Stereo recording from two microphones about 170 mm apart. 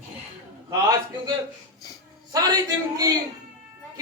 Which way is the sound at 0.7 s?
25° right (ahead or behind).